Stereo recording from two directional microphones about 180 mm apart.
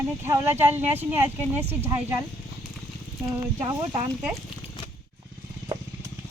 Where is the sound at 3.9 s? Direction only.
20° right (ahead or behind).